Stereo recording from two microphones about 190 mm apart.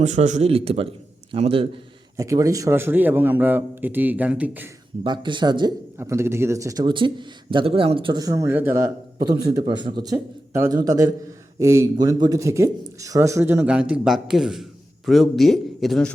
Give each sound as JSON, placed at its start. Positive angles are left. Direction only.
{"t": 0.0, "sound": "a man's voice", "side_deg": -40}
{"t": 2.1, "sound": "a man's voice", "side_deg": -15}
{"t": 5.0, "sound": "a man's voice", "side_deg": -25}